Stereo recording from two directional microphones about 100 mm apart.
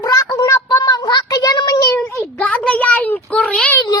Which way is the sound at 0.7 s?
40° left (ahead or behind).